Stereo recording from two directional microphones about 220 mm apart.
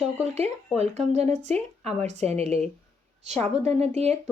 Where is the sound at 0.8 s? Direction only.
30° right (ahead or behind).